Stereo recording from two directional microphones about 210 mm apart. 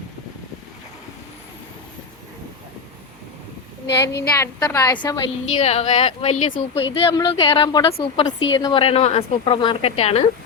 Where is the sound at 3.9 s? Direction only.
50° left (ahead or behind).